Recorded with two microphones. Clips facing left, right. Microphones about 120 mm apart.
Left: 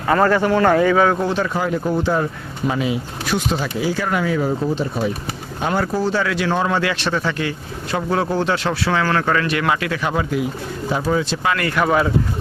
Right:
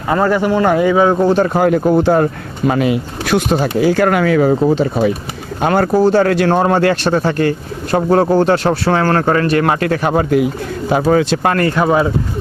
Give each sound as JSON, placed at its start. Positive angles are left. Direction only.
{"t": 0.1, "sound": "speech", "side_deg": -10}
{"t": 1.2, "sound": "speech", "side_deg": -45}
{"t": 5.6, "sound": "speech", "side_deg": -55}
{"t": 11.5, "sound": "speech", "side_deg": -30}